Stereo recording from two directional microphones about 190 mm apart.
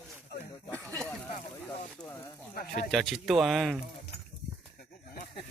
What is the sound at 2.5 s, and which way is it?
Speech, 45° left (ahead or behind).